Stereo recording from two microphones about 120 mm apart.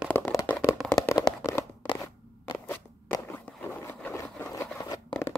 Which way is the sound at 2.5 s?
15° left (ahead or behind).